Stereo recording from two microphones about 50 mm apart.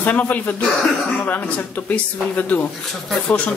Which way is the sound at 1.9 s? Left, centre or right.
Left.